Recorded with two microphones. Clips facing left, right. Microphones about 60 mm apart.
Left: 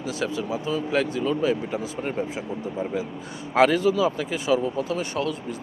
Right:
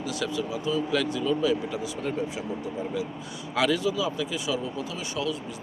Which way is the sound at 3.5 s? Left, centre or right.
Left.